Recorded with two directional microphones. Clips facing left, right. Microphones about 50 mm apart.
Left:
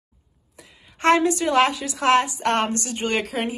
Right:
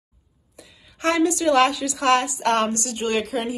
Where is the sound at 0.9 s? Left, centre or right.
Left.